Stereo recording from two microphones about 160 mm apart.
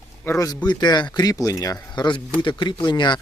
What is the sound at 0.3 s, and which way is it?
Speech, 20° left (ahead or behind).